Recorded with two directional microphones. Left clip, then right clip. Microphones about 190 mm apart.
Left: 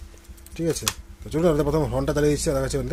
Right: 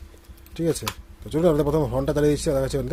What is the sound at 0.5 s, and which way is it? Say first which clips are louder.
Speech: even; 15° right (ahead or behind).